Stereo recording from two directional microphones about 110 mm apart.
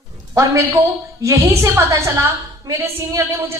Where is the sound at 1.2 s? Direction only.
25° right (ahead or behind).